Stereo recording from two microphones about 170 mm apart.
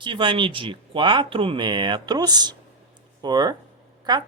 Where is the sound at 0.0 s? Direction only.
30° right (ahead or behind).